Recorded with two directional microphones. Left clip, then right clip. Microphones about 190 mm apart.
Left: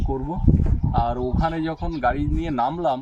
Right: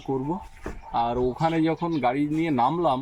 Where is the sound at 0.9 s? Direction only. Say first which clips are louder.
Even; centre (ahead or behind).